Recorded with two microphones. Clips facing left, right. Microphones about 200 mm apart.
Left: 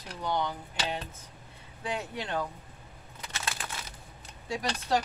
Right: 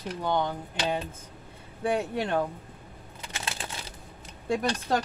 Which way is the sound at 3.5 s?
30° right (ahead or behind).